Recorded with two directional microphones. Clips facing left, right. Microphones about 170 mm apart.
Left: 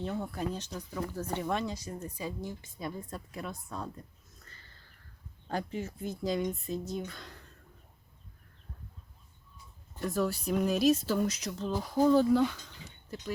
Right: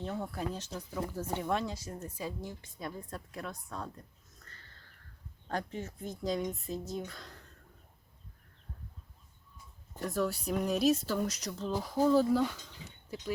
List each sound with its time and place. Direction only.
0.0 s a woman's voice: centre (ahead or behind)
5.5 s a woman's voice: 5° left (ahead or behind)
10.0 s a woman's voice: centre (ahead or behind)